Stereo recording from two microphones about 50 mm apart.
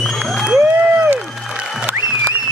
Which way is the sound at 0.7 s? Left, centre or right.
Right.